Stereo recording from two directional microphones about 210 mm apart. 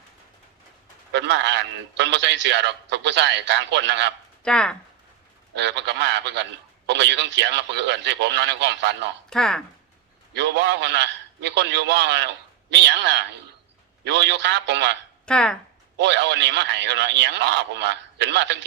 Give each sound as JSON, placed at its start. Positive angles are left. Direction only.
{"t": 1.1, "sound": "a man's voice", "side_deg": -55}
{"t": 4.4, "sound": "speech", "side_deg": 5}
{"t": 5.5, "sound": "a man's voice", "side_deg": -55}
{"t": 9.3, "sound": "speech", "side_deg": 5}
{"t": 10.3, "sound": "a man's voice", "side_deg": -55}
{"t": 15.3, "sound": "speech", "side_deg": 5}
{"t": 16.0, "sound": "a man's voice", "side_deg": -55}